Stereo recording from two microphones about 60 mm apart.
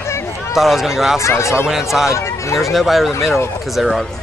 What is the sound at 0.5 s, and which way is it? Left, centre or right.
Speech, centre.